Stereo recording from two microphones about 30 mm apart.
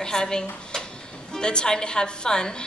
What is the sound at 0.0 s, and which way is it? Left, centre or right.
A woman's voice, left.